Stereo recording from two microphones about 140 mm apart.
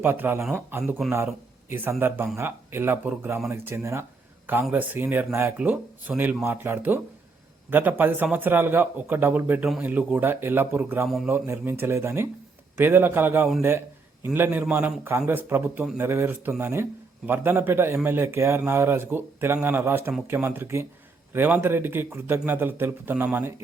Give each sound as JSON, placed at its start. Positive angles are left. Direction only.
{"t": 0.0, "sound": "a man's voice", "side_deg": -15}